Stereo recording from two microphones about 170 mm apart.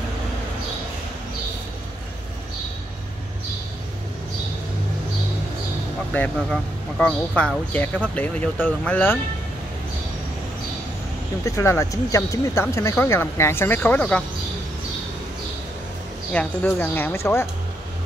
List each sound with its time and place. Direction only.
6.1 s speech: 5° left (ahead or behind)
11.4 s speech: 15° left (ahead or behind)
16.3 s speech: 5° left (ahead or behind)